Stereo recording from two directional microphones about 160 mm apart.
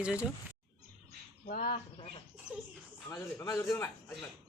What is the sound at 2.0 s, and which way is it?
Speech, 35° left (ahead or behind).